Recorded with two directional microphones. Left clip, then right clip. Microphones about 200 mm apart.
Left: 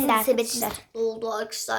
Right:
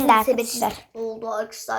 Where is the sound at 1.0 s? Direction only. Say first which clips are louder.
Left 4 dB; 25° left (ahead or behind).